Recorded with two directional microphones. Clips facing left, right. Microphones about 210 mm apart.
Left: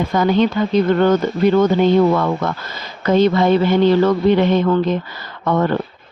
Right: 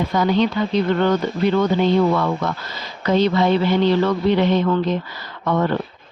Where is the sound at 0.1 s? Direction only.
50° left (ahead or behind).